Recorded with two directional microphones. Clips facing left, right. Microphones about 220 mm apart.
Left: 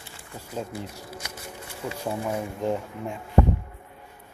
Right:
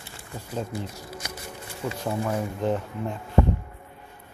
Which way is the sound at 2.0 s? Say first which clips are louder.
Right 1 dB; 10° left (ahead or behind).